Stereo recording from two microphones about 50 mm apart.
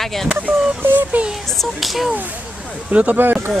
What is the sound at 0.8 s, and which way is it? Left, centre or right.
Speech, right.